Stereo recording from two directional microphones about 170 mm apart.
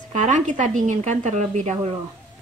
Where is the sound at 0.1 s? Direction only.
45° right (ahead or behind).